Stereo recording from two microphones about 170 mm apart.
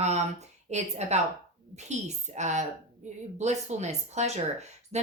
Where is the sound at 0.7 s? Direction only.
40° right (ahead or behind).